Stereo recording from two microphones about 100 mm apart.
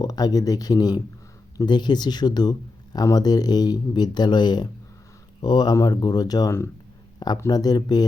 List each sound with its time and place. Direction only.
0.0 s speech: 40° left (ahead or behind)
7.5 s speech: 40° left (ahead or behind)